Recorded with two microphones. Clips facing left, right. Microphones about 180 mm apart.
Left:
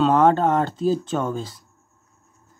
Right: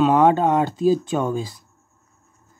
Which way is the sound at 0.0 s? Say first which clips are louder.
Right 1 dB; 10° right (ahead or behind).